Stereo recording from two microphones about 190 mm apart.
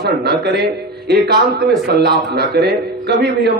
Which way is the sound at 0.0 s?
60° right (ahead or behind).